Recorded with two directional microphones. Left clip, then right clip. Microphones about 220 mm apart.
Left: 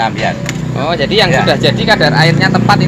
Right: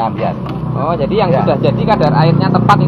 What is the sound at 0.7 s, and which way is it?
Speech, 30° left (ahead or behind).